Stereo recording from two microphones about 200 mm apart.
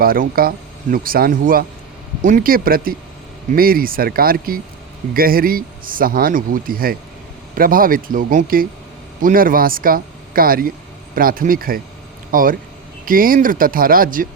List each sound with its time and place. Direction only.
0.0 s speech: 45° right (ahead or behind)